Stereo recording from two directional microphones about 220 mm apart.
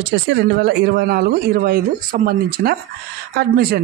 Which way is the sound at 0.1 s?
50° right (ahead or behind).